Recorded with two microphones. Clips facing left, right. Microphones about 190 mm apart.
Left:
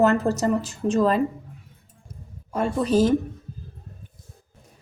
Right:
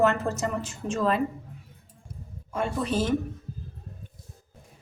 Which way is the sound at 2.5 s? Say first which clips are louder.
Left 6 dB; 40° left (ahead or behind).